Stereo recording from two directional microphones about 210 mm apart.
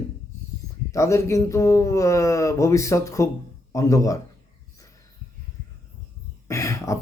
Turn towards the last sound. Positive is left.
turn(degrees=15)  # may be behind; listen again after turning